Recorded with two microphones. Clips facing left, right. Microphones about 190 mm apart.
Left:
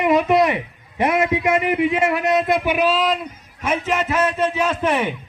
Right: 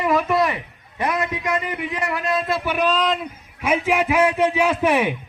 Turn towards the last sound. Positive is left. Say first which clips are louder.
# right 2 dB
turn(degrees=-10)  # may be behind; listen again after turning